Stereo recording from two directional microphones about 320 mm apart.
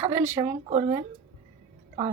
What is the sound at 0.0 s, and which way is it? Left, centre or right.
Speech, centre.